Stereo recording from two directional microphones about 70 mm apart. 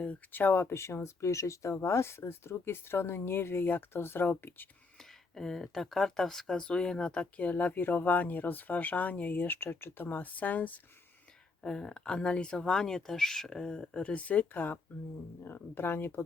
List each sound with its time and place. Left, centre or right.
0.0 s speech: left
4.9 s speech: centre; by 10.8 s left
11.6 s speech: centre; by 16.2 s left